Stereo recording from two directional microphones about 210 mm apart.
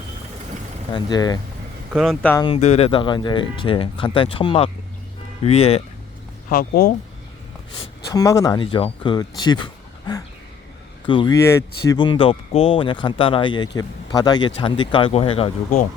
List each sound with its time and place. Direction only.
0.9 s speech: 20° left (ahead or behind)
1.9 s speech: centre (ahead or behind)
2.3 s speech: 20° left (ahead or behind)
6.5 s speech: 45° left (ahead or behind)
8.1 s speech: 15° left (ahead or behind)
11.0 s speech: 20° left (ahead or behind)